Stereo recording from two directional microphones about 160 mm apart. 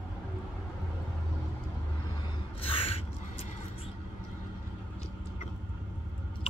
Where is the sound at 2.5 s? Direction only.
35° left (ahead or behind).